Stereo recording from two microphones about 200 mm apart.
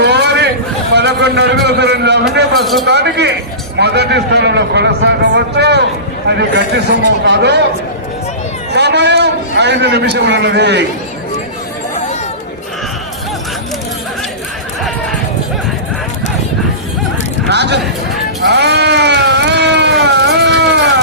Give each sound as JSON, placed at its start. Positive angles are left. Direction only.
{"t": 0.0, "sound": "a sound", "side_deg": -60}
{"t": 2.6, "sound": "a man's voice", "side_deg": 0}
{"t": 2.8, "sound": "a man's voice", "side_deg": -55}
{"t": 8.7, "sound": "a man's voice", "side_deg": -55}
{"t": 17.5, "sound": "a man's voice", "side_deg": -60}
{"t": 18.4, "sound": "sheep", "side_deg": -55}